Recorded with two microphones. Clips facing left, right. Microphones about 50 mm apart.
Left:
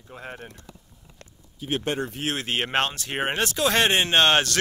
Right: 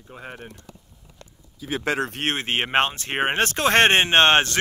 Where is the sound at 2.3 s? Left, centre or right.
Right.